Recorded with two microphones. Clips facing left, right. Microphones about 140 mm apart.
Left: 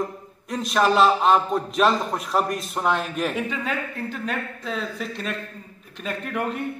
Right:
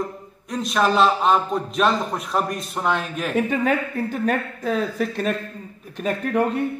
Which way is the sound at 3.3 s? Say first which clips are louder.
Right 7 dB; 50° right (ahead or behind).